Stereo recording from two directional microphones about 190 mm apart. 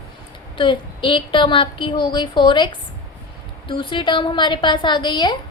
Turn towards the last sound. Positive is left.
turn(degrees=25)  # may be behind; listen again after turning